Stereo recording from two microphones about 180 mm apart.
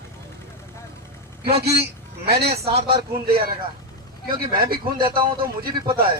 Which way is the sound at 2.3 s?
35° right (ahead or behind).